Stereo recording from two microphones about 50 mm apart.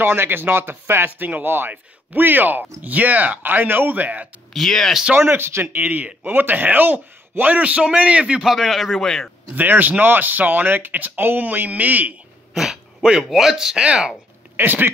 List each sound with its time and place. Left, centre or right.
0.0 s speech: right
4.6 s a man's voice: centre
5.1 s speech: right
5.4 s speech: right
5.9 s speech: right
8.4 s a man's voice: centre
9.6 s speech: right
13.2 s speech: centre
14.6 s speech: right